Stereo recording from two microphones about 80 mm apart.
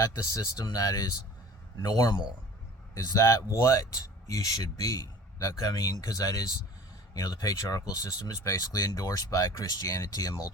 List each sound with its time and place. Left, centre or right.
0.0 s speech: left